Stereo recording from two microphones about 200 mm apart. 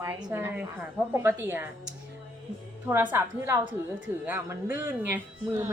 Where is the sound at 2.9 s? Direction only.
10° right (ahead or behind).